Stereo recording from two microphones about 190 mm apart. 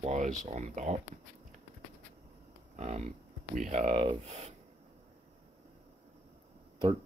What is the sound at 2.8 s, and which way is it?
Speech, 35° right (ahead or behind).